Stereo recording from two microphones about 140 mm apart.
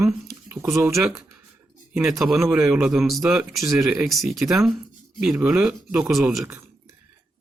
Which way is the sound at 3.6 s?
20° right (ahead or behind).